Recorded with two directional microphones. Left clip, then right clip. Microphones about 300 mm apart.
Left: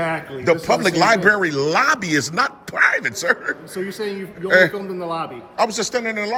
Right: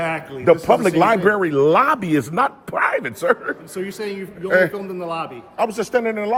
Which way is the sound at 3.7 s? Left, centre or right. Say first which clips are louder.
Left 1 dB; centre.